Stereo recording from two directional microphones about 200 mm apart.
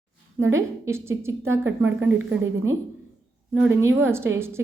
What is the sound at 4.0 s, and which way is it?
Speech, 10° right (ahead or behind).